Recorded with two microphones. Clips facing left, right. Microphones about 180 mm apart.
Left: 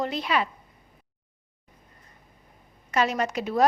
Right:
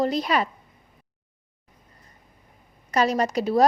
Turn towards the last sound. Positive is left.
turn(degrees=-35)  # may be behind; listen again after turning